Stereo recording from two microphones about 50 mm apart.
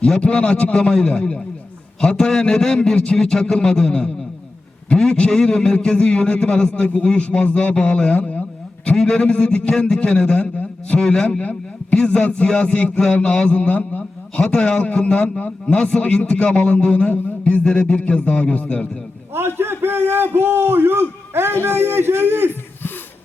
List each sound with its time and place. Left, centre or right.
0.2 s a man's voice: left
8.9 s a man's voice: centre
9.3 s a man's voice: left
12.9 s a man's voice: centre
14.3 s a man's voice: centre
19.3 s a sound: right